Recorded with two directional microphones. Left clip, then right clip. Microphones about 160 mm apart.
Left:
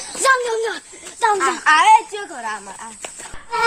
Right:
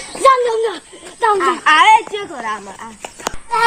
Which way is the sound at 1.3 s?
15° left (ahead or behind).